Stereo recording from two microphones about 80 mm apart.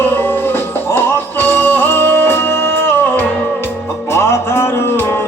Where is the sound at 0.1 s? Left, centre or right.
Left.